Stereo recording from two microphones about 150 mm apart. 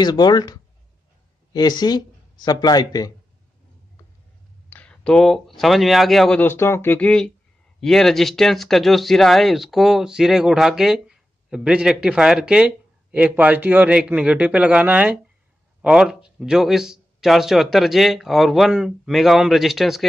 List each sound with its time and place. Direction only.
0.0 s speech: 30° left (ahead or behind)
4.6 s speech: 10° left (ahead or behind)
6.4 s speech: 15° left (ahead or behind); by 20.1 s centre (ahead or behind)